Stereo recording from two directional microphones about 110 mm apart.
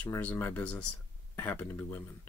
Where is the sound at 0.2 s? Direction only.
15° left (ahead or behind).